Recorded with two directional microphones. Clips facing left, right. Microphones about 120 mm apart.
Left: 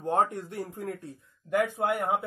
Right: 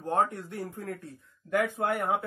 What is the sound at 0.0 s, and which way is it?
Speech, 20° left (ahead or behind).